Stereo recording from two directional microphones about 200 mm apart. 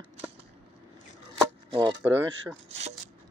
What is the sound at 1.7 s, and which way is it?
Speech, 20° right (ahead or behind).